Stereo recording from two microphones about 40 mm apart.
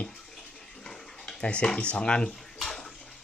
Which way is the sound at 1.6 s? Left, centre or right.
Left.